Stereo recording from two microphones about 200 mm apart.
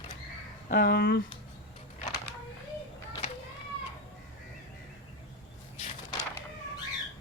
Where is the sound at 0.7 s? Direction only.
50° left (ahead or behind).